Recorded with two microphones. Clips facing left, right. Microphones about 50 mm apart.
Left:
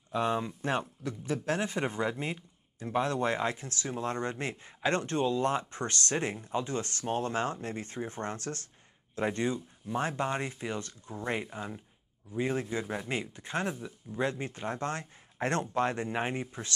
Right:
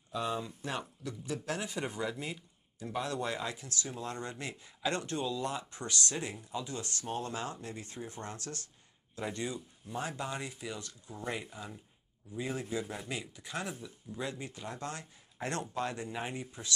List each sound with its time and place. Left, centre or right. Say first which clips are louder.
0.1 s speech: left 5 dB; left